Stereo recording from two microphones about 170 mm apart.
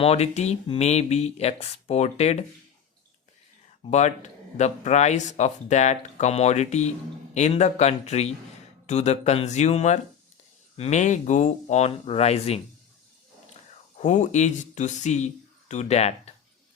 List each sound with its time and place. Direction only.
0.0 s speech: 40° left (ahead or behind)
3.8 s speech: 40° left (ahead or behind)
13.9 s speech: 45° left (ahead or behind)